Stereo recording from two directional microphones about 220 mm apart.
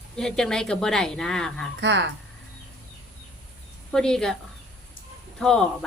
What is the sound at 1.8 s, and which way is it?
Speech, 50° right (ahead or behind).